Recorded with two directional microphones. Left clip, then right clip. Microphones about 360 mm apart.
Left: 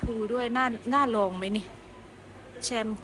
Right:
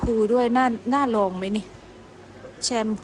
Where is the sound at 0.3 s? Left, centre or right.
Centre.